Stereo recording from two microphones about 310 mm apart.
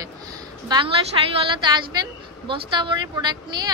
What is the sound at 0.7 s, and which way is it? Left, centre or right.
Speech, centre.